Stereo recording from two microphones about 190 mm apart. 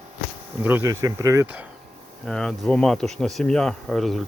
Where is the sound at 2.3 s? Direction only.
Centre (ahead or behind).